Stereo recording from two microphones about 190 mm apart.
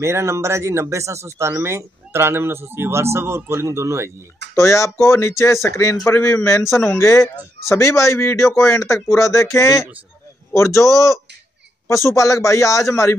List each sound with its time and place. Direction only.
0.0 s speech: 15° right (ahead or behind)
4.6 s speech: 15° left (ahead or behind)